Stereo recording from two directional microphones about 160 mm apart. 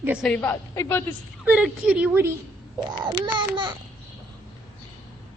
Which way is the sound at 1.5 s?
5° right (ahead or behind).